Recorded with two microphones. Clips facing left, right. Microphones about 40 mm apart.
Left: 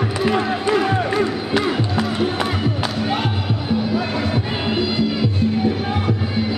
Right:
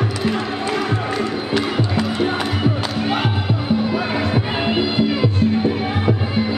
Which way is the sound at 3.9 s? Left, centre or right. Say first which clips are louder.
Right 1 dB; centre.